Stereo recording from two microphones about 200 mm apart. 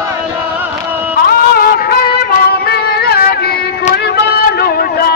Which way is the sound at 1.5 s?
50° left (ahead or behind).